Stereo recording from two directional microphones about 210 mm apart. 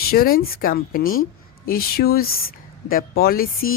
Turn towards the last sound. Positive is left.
turn(degrees=45)  # may be behind; listen again after turning